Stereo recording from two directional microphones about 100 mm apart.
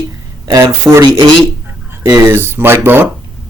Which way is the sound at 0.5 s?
30° right (ahead or behind).